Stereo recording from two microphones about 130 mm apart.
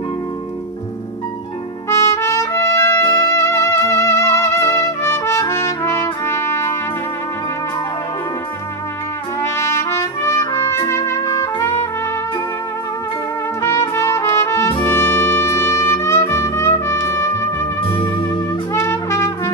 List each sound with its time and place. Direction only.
1.9 s trumpet: 20° left (ahead or behind)
9.4 s trumpet: 20° left (ahead or behind)
13.6 s trumpet: 20° left (ahead or behind)